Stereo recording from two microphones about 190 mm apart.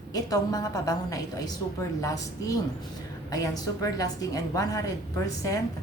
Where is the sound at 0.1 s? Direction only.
20° left (ahead or behind).